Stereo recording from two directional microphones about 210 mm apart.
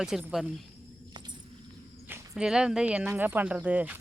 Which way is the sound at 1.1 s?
20° right (ahead or behind).